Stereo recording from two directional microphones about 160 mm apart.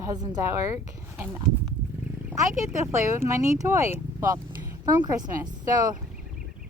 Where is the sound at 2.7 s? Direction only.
15° right (ahead or behind).